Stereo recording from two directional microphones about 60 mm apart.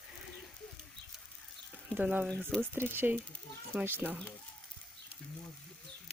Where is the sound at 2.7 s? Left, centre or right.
Right.